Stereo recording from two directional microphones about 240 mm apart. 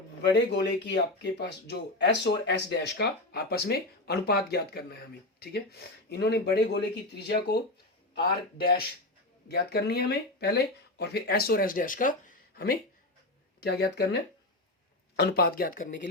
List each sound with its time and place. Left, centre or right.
0.2 s speech: left
6.1 s speech: left